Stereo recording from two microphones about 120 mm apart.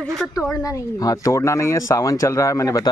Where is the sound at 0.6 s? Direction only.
30° left (ahead or behind).